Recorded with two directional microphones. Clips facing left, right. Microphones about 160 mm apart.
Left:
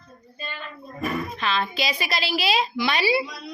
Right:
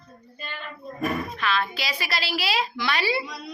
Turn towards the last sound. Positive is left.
turn(degrees=15)  # may be behind; listen again after turning